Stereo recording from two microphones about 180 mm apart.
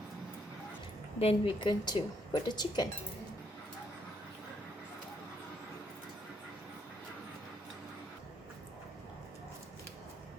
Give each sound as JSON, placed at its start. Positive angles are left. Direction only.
{"t": 1.2, "sound": "speech", "side_deg": 30}